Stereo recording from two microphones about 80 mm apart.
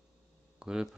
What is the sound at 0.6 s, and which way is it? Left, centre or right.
Speech, centre.